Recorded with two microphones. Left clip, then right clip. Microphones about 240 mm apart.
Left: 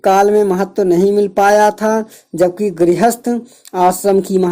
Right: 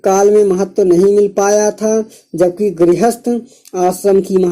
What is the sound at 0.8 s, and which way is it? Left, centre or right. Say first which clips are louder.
Speech: right 3 dB; left.